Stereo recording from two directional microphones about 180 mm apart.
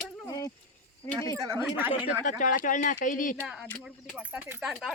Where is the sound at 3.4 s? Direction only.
Centre (ahead or behind).